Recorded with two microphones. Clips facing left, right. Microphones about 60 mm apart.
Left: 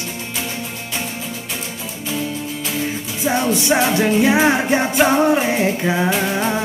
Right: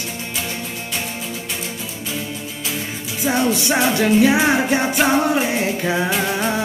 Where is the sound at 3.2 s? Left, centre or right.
Left.